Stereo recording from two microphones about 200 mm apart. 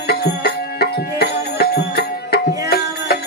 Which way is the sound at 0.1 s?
50° left (ahead or behind).